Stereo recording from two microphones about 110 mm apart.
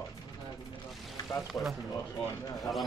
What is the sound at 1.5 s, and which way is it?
Speech, centre (ahead or behind).